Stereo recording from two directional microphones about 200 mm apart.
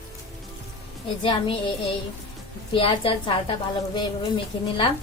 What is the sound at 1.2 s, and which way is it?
Speech, 25° left (ahead or behind).